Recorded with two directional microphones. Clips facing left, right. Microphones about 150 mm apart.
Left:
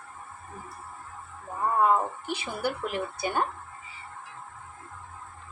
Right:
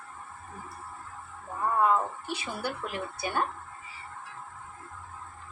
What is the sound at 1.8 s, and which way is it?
Speech, 15° left (ahead or behind).